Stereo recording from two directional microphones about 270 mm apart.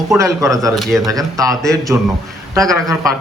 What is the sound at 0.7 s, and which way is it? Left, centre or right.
Speech, centre.